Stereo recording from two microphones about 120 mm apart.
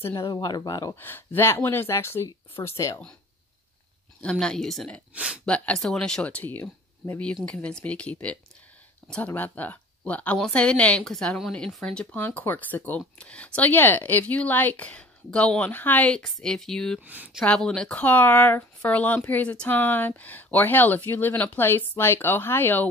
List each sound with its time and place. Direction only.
0.0 s speech: 25° left (ahead or behind)
0.9 s speech: 15° left (ahead or behind)
4.2 s speech: 5° left (ahead or behind)
5.1 s speech: 10° right (ahead or behind)
5.4 s speech: 10° left (ahead or behind)
17.0 s speech: 15° right (ahead or behind)
17.5 s speech: 5° left (ahead or behind)